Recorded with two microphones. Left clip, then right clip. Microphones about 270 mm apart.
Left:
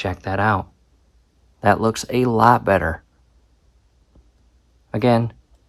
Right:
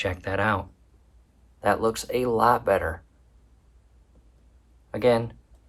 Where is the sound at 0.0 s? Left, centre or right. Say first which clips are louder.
Left 5 dB; centre.